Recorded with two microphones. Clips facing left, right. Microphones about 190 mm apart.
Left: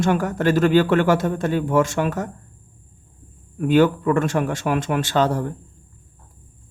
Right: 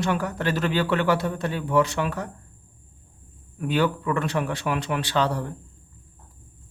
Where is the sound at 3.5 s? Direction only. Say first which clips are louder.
Left 7 dB; 45° left (ahead or behind).